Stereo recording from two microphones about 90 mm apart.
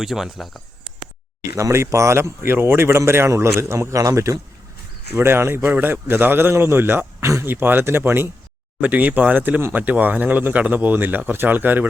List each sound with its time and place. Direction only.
0.0 s speech: 5° right (ahead or behind)
1.4 s speech: 35° right (ahead or behind)
5.1 s speech: 25° right (ahead or behind)